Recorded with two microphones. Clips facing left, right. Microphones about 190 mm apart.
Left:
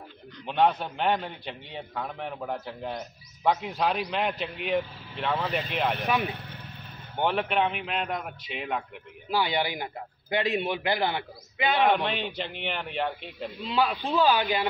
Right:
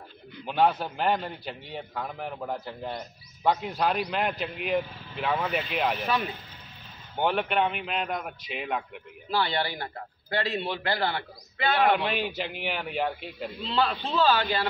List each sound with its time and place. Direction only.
0.4 s a man's voice: 5° right (ahead or behind)
6.0 s a man's voice: 15° left (ahead or behind)
6.3 s vehicle: 65° left (ahead or behind)
7.2 s a man's voice: centre (ahead or behind)
9.3 s a man's voice: 15° left (ahead or behind)
11.8 s a man's voice: 5° right (ahead or behind)
13.7 s a man's voice: 10° left (ahead or behind)